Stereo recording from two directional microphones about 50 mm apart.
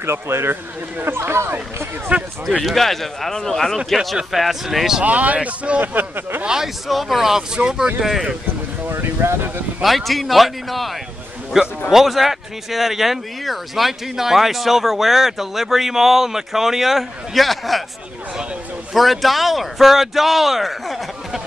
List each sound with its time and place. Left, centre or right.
0.0 s speech: right
2.1 s speech: right
2.6 s speech: centre
5.0 s speech: right
6.4 s speech: centre
8.8 s speech: right
9.8 s speech: centre
18.9 s speech: centre